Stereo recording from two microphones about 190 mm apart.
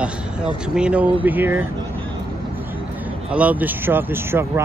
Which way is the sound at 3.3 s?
10° right (ahead or behind).